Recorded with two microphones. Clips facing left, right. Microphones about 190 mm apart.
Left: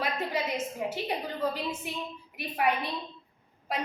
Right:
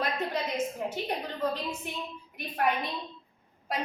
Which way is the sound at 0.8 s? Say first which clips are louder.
Left 1 dB; 5° left (ahead or behind).